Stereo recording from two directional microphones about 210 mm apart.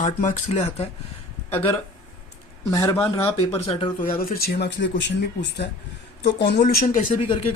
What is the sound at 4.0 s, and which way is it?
Speech, 45° left (ahead or behind).